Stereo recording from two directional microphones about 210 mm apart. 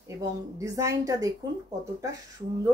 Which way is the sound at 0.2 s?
15° right (ahead or behind).